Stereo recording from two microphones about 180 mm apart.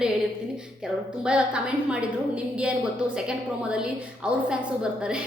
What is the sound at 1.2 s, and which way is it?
A woman's voice, 5° right (ahead or behind).